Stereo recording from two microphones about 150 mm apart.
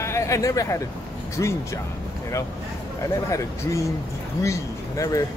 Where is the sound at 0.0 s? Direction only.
20° left (ahead or behind).